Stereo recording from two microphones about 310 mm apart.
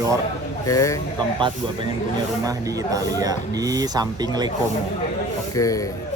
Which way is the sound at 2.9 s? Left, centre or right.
Centre.